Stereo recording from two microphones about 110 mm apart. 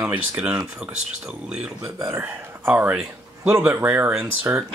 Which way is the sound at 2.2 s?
15° right (ahead or behind).